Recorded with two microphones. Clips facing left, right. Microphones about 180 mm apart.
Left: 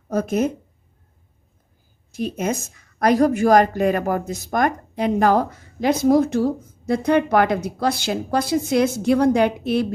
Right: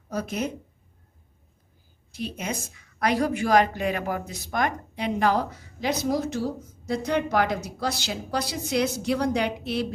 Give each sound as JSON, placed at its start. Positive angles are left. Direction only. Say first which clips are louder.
{"t": 0.1, "sound": "speech", "louder": "left 8 dB", "side_deg": 50}
{"t": 2.1, "sound": "a woman's voice", "louder": "left 8 dB", "side_deg": 45}